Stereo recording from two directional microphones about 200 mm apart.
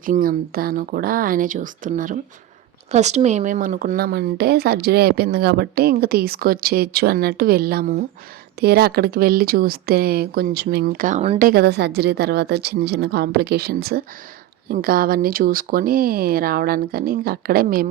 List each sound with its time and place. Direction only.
0.0 s speech: 45° right (ahead or behind)
11.4 s speech: 55° right (ahead or behind)